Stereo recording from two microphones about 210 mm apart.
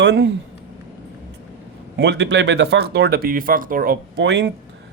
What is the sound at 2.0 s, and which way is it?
A man's voice, 55° right (ahead or behind).